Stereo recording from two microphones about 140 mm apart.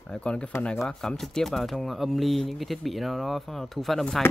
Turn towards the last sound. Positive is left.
turn(degrees=0)  # may be behind; listen again after turning